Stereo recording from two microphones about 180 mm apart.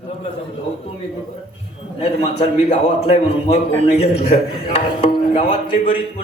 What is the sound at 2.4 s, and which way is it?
A man's voice, 35° left (ahead or behind).